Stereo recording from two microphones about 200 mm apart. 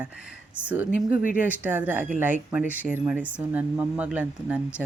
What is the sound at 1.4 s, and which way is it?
Speech, 10° right (ahead or behind).